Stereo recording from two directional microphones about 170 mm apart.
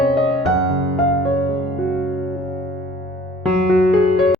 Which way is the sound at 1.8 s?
Centre (ahead or behind).